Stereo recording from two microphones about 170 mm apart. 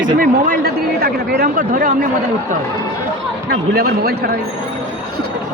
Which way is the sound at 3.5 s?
70° right (ahead or behind).